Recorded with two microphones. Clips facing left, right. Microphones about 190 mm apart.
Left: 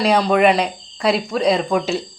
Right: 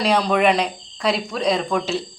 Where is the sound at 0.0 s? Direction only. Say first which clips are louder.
Left 3 dB; 5° left (ahead or behind).